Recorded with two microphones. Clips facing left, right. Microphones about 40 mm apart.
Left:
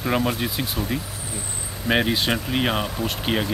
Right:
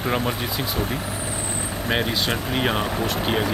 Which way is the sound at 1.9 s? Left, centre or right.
Centre.